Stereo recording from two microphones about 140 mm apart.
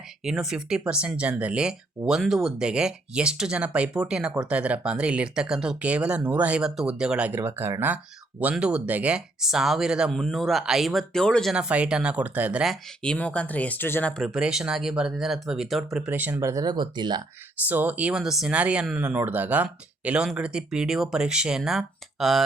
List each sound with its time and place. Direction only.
0.3 s speech: 5° right (ahead or behind)
11.5 s speech: 5° right (ahead or behind)
13.0 s speech: 10° left (ahead or behind)
14.2 s speech: 5° right (ahead or behind)
16.0 s speech: 10° right (ahead or behind); by 17.2 s 30° right (ahead or behind)
17.7 s speech: 10° right (ahead or behind)